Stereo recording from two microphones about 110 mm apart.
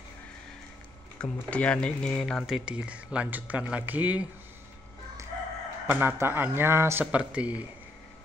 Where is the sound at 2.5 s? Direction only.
10° right (ahead or behind).